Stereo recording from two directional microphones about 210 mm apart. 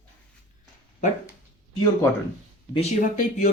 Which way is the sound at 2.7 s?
35° left (ahead or behind).